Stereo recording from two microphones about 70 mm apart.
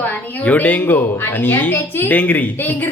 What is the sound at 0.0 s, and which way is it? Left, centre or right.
A man's voice, left.